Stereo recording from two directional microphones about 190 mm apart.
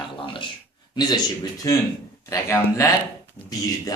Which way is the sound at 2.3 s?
15° left (ahead or behind).